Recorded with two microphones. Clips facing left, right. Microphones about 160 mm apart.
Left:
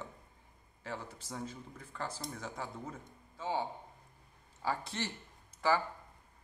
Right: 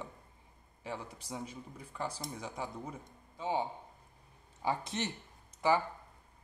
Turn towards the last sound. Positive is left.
turn(degrees=-15)  # may be behind; listen again after turning